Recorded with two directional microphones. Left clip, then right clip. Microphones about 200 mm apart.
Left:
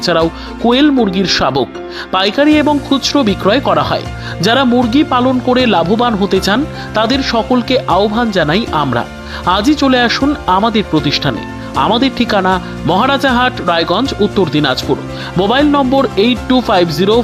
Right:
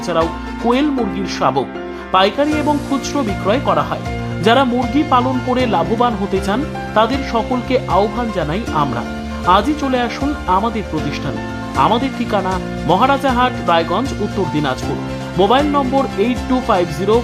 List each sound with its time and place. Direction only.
0.0 s speech: 25° left (ahead or behind)